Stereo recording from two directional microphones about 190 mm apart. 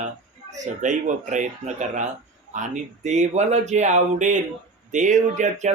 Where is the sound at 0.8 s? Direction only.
40° right (ahead or behind).